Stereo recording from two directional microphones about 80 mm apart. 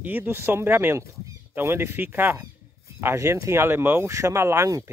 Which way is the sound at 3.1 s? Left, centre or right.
Right.